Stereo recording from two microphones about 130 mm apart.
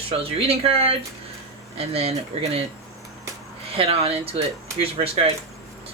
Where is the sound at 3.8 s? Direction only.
50° right (ahead or behind).